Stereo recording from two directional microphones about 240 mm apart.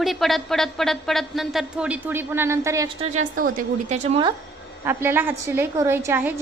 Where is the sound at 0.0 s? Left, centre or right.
Centre.